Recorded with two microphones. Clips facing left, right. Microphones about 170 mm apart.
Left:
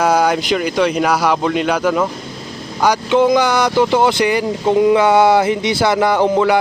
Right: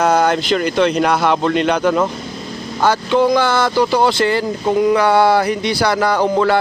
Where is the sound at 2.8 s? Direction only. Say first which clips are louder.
Left 1 dB; 15° left (ahead or behind).